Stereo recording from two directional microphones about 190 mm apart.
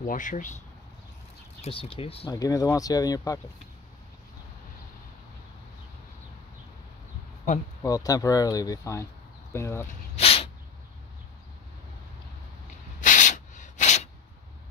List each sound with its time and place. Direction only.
0.0 s speech: 45° left (ahead or behind)
1.6 s speech: 30° left (ahead or behind)
2.3 s speech: 20° left (ahead or behind)
7.8 s speech: 20° left (ahead or behind)
10.1 s a sound: 30° left (ahead or behind)
13.0 s a sound: 40° left (ahead or behind)